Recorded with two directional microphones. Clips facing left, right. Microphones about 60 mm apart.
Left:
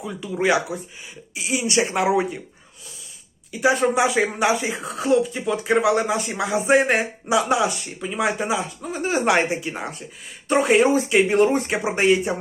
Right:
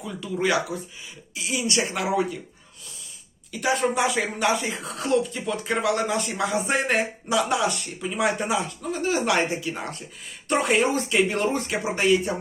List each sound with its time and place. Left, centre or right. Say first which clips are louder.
0.0 s speech: left 3 dB; centre
3.5 s speech: left 4 dB; centre
8.9 s speech: left 3 dB; left
10.5 s speech: left 5 dB; centre
11.3 s speech: left 6 dB; left